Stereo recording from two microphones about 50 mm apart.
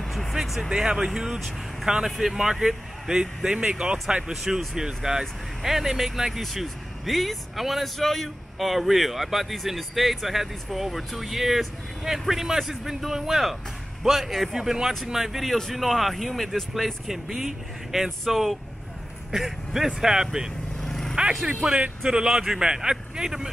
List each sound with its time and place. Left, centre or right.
0.0 s a sound: centre
0.6 s speech: centre
4.3 s speech: centre
20.8 s vehicle: centre
21.5 s speech: centre